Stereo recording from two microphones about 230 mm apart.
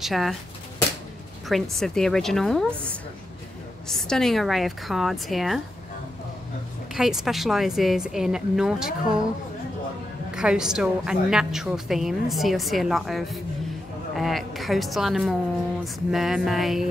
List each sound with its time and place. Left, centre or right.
0.0 s a woman's voice: centre
1.5 s a woman's voice: centre
3.9 s a woman's voice: centre
7.0 s a woman's voice: centre
10.3 s a woman's voice: centre